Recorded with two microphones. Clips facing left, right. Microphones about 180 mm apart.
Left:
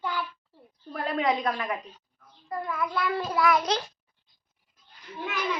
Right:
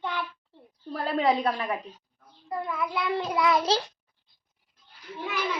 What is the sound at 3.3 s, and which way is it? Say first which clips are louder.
Speech: right 1 dB; 20° right (ahead or behind).